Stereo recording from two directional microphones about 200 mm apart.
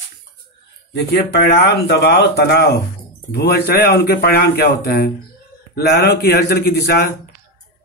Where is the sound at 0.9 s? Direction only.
60° left (ahead or behind).